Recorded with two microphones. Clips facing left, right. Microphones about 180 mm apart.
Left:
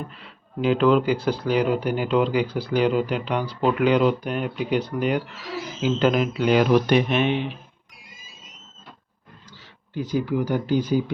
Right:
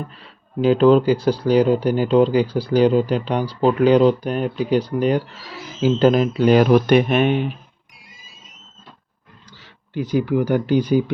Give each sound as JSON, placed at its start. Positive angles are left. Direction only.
{"t": 0.2, "sound": "speech", "side_deg": -35}
{"t": 9.9, "sound": "speech", "side_deg": -70}